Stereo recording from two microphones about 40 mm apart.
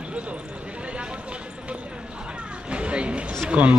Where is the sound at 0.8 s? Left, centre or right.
Right.